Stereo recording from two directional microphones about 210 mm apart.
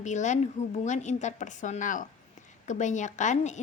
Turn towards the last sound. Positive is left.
turn(degrees=35)  # may be behind; listen again after turning